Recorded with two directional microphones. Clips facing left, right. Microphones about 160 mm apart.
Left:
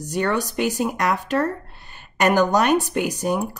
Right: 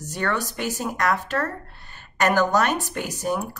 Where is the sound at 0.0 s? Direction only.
15° left (ahead or behind).